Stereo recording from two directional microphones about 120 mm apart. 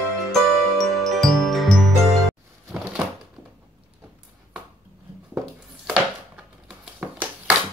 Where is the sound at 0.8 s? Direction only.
Centre (ahead or behind).